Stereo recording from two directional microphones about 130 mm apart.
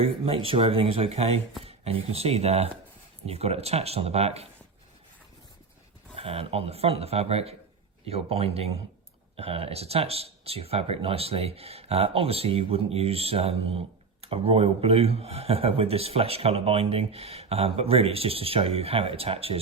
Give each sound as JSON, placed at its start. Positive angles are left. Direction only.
{"t": 0.0, "sound": "speech", "side_deg": -45}
{"t": 6.1, "sound": "speech", "side_deg": -50}